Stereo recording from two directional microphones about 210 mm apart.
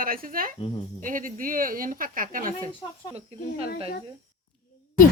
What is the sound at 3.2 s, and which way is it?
Speech, 30° right (ahead or behind).